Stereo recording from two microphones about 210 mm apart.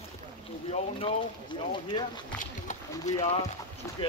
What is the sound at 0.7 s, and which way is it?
Speech, 25° left (ahead or behind).